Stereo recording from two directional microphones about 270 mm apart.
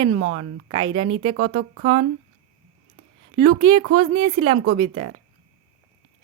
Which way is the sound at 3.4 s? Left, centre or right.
Centre.